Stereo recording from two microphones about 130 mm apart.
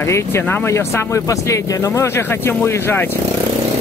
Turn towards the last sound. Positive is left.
turn(degrees=15)  # may be behind; listen again after turning